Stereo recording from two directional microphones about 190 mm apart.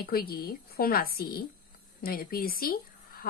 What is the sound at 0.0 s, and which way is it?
Speech, 55° left (ahead or behind).